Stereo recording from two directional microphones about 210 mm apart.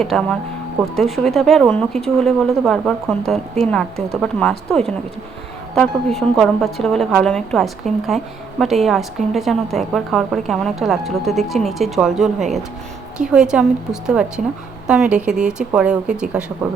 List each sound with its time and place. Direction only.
0.0 s a woman's voice: 5° left (ahead or behind)